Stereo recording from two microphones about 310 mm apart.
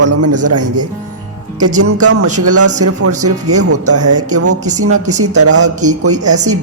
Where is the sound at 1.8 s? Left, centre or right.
Right.